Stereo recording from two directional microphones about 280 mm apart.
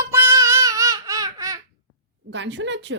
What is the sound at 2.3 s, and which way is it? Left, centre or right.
Speech, right.